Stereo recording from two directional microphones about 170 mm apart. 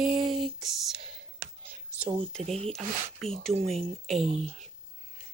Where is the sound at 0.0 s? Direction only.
Centre (ahead or behind).